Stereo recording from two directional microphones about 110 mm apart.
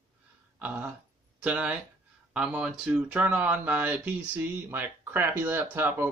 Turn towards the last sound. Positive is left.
turn(degrees=-20)  # may be behind; listen again after turning